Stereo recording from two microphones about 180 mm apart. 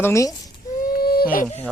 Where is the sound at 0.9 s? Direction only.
55° left (ahead or behind).